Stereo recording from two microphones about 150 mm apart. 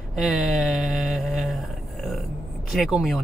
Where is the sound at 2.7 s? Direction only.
Centre (ahead or behind).